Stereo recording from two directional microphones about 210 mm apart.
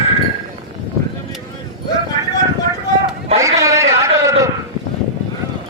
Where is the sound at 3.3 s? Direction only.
15° right (ahead or behind).